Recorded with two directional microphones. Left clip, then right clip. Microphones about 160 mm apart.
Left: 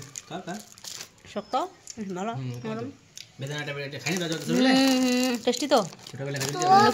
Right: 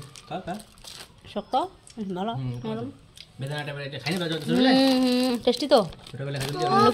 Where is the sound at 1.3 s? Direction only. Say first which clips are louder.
Right 2 dB; 20° right (ahead or behind).